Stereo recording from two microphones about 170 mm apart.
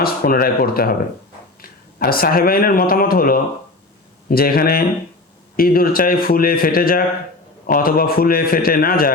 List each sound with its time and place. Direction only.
0.0 s a man's voice: 60° left (ahead or behind)